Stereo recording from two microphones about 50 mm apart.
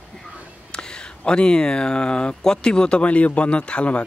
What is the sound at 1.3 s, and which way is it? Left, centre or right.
Speech, centre.